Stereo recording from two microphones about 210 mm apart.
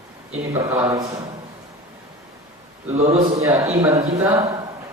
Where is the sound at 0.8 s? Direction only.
10° right (ahead or behind).